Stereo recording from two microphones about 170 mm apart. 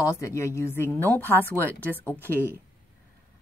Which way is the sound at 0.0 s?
15° left (ahead or behind).